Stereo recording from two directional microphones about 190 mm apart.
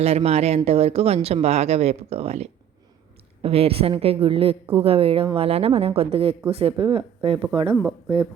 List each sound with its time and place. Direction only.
0.0 s a woman's voice: 35° right (ahead or behind)
7.8 s speech: 10° right (ahead or behind)